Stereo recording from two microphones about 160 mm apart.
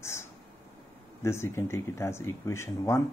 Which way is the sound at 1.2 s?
15° left (ahead or behind).